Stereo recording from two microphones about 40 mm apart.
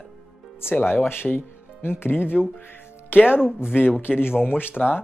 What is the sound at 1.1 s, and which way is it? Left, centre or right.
Speech, left.